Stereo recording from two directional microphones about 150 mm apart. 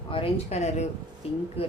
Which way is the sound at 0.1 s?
40° left (ahead or behind).